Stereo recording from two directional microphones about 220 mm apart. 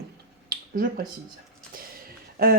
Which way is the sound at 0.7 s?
40° right (ahead or behind).